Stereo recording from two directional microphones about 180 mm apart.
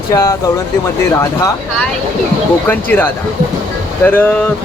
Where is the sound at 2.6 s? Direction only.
10° left (ahead or behind).